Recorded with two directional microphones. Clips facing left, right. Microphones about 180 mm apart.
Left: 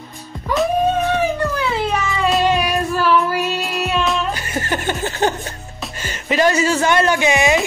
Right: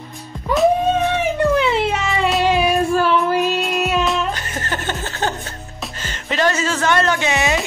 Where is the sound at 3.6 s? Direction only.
Centre (ahead or behind).